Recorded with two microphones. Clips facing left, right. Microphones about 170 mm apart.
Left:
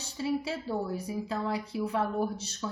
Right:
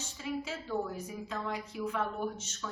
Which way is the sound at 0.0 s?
35° left (ahead or behind).